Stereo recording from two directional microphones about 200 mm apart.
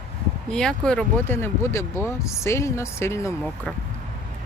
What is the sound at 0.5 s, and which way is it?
Speech, 5° left (ahead or behind).